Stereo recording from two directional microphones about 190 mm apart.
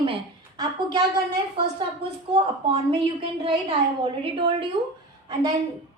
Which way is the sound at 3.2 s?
30° right (ahead or behind).